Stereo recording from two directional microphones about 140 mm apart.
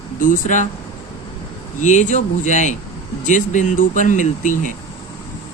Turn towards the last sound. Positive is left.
turn(degrees=65)  # may be behind; listen again after turning